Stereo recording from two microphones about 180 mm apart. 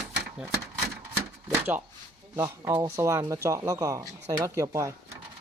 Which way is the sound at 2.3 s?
15° right (ahead or behind).